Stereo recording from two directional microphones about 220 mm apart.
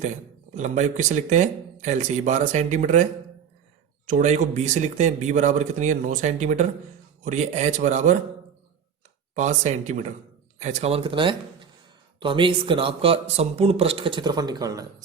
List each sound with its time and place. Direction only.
0.0 s speech: 35° right (ahead or behind)
9.3 s speech: 35° right (ahead or behind); by 15.0 s 15° right (ahead or behind)